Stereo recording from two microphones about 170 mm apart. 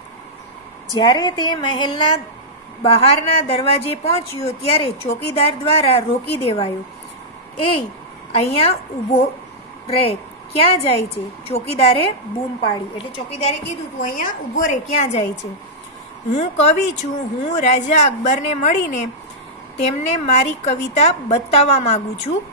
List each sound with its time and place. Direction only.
0.9 s a woman's voice: 25° left (ahead or behind)
14.0 s a woman's voice: 50° left (ahead or behind)
16.3 s speech: 40° left (ahead or behind)